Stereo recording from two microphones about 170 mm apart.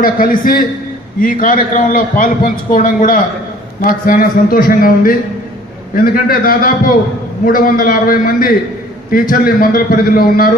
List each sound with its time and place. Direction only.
0.0 s a man's voice: 55° left (ahead or behind)